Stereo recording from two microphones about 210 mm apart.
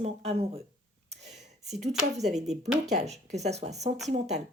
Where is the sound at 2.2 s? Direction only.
30° right (ahead or behind).